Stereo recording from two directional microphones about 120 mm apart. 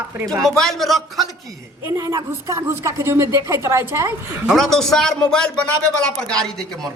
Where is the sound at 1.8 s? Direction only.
20° right (ahead or behind).